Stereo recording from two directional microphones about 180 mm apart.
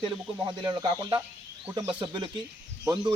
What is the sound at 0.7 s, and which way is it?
Speech, 20° right (ahead or behind).